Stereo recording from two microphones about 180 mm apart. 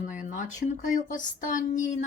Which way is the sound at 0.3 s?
45° left (ahead or behind).